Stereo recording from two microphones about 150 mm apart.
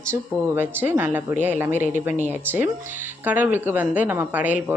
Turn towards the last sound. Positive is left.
turn(degrees=-10)  # may be behind; listen again after turning